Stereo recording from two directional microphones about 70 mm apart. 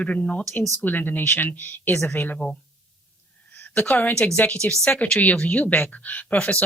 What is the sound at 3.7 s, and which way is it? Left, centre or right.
Speech, left.